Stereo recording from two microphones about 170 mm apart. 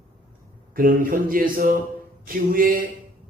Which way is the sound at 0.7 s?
55° right (ahead or behind).